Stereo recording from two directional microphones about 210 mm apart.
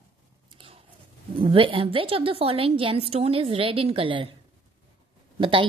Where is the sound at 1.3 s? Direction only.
25° right (ahead or behind).